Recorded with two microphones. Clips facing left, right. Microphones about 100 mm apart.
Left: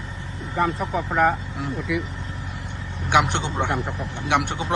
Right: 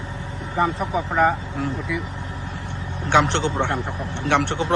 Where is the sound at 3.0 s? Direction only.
15° left (ahead or behind).